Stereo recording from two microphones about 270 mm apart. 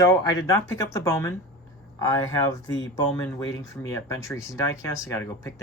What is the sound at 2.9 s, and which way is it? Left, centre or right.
Speech, centre.